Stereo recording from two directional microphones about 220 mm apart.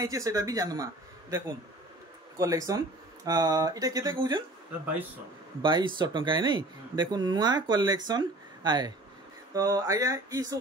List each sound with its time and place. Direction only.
0.0 s speech: 15° right (ahead or behind)
2.3 s speech: 15° right (ahead or behind)
5.6 s speech: 20° right (ahead or behind)